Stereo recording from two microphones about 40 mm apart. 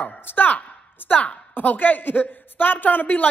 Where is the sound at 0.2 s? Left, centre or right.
Left.